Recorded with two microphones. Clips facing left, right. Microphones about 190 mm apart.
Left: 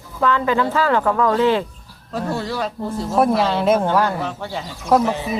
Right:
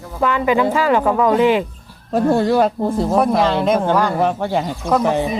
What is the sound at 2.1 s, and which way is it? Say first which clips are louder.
Speech: right 9 dB; 55° right (ahead or behind).